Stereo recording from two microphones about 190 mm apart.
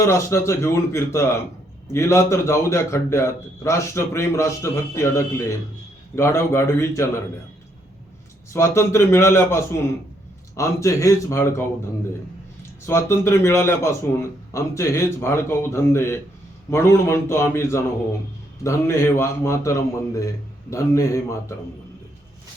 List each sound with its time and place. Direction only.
0.0 s a man's voice: 15° left (ahead or behind)
8.5 s a man's voice: 15° left (ahead or behind)
12.8 s a man's voice: 15° left (ahead or behind)